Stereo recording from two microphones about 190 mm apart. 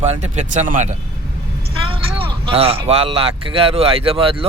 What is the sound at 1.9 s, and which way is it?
Speech, 30° right (ahead or behind).